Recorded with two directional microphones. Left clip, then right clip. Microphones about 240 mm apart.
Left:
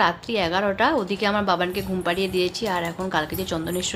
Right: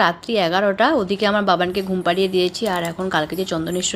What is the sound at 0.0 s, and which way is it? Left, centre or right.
Speech, centre.